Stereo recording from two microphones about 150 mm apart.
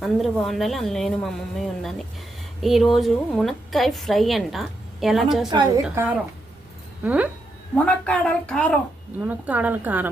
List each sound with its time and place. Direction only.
0.0 s a woman's voice: centre (ahead or behind)
5.5 s a woman's voice: 25° right (ahead or behind)
5.9 s a woman's voice: 15° right (ahead or behind)
7.9 s a woman's voice: 5° left (ahead or behind)
9.2 s a woman's voice: 10° right (ahead or behind)